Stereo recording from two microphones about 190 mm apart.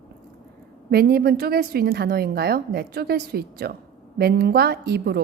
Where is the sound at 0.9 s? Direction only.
55° right (ahead or behind).